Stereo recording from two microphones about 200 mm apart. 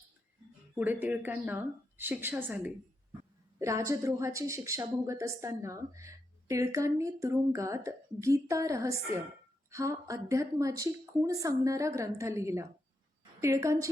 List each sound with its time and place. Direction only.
0.8 s speech: 10° right (ahead or behind)